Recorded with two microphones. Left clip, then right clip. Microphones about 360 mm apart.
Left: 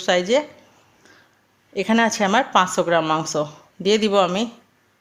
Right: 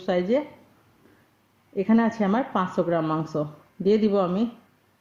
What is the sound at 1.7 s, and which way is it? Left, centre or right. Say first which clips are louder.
Speech: left 5 dB; left.